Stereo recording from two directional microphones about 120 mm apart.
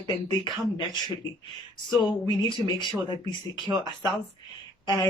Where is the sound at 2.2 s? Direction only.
40° left (ahead or behind).